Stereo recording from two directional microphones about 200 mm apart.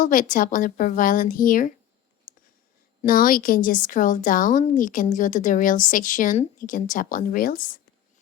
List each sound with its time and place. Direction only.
0.0 s a woman's voice: 45° left (ahead or behind)
2.3 s a sound: 45° left (ahead or behind)
3.0 s a woman's voice: 45° left (ahead or behind)